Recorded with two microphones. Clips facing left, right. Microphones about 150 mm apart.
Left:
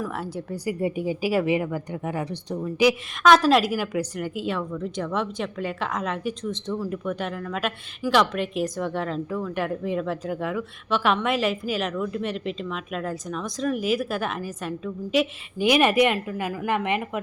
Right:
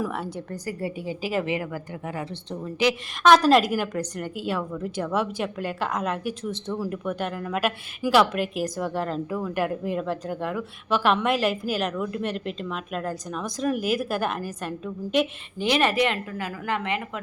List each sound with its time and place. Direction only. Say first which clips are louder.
0.1 s a woman's voice: left 1 dB; centre (ahead or behind)
3.2 s a woman's voice: even; centre (ahead or behind)
15.6 s a woman's voice: left 3 dB; 15° left (ahead or behind)